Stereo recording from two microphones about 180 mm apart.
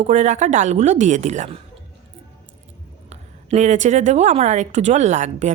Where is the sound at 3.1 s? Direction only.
40° right (ahead or behind).